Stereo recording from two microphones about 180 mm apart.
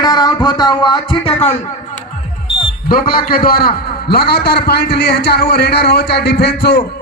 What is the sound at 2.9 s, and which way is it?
A man's voice, 55° left (ahead or behind).